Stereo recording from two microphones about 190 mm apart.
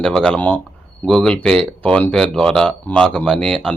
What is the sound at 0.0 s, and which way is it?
Speech, 5° left (ahead or behind).